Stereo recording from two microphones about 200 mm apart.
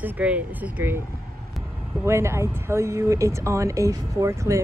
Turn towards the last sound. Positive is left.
turn(degrees=-15)  # may be behind; listen again after turning